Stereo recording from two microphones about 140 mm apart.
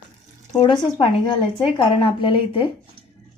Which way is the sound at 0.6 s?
35° left (ahead or behind).